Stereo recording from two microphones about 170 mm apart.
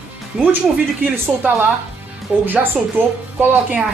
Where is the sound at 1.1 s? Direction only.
10° right (ahead or behind).